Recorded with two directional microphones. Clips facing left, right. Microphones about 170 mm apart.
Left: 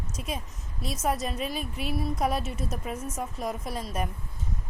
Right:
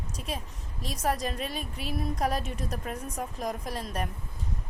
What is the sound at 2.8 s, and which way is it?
A woman's voice, 5° left (ahead or behind).